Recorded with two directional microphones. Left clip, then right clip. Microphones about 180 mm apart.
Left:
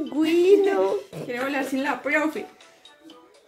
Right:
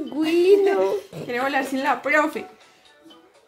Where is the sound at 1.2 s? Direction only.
55° right (ahead or behind).